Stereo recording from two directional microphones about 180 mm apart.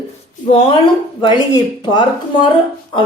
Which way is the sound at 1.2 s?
25° left (ahead or behind).